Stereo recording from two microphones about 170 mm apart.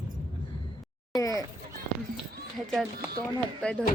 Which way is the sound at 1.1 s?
20° left (ahead or behind).